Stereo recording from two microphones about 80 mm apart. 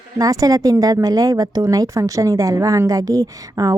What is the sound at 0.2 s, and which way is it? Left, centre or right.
Speech, right.